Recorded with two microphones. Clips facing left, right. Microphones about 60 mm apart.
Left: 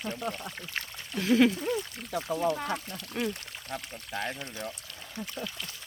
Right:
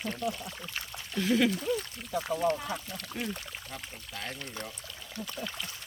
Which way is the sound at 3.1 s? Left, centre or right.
Left.